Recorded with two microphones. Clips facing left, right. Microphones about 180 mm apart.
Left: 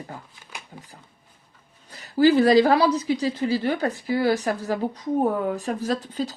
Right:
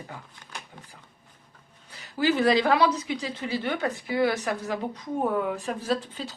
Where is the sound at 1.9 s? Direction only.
40° left (ahead or behind).